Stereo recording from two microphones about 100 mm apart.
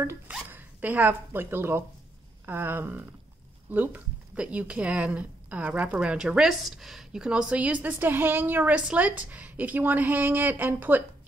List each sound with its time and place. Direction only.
0.3 s speech: 15° right (ahead or behind)